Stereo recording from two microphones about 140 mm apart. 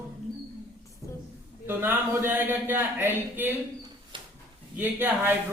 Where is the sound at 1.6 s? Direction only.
15° right (ahead or behind).